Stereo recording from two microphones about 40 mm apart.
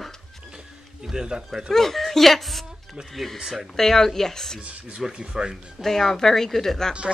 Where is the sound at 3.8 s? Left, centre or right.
Centre.